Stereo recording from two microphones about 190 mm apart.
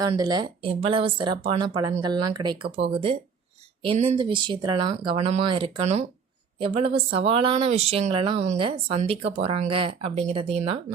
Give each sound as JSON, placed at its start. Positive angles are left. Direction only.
{"t": 0.1, "sound": "speech", "side_deg": -20}
{"t": 4.2, "sound": "speech", "side_deg": -25}